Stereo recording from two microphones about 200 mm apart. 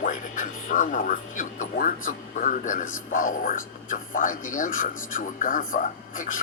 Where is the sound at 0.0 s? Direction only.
40° left (ahead or behind).